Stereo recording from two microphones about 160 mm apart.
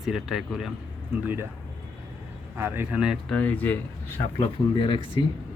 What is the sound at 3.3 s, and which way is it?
Speech, 10° left (ahead or behind).